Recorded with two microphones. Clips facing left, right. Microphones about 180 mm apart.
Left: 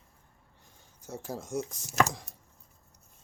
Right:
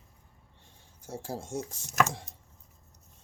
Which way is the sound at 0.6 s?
30° right (ahead or behind).